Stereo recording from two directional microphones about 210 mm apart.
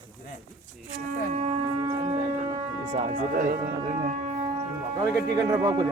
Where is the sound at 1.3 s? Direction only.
30° right (ahead or behind).